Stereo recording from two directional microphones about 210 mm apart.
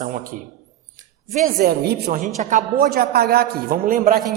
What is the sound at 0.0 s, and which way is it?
Speech, 40° right (ahead or behind).